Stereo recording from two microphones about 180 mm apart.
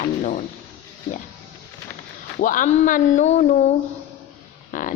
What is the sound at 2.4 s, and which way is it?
Speech, 50° left (ahead or behind).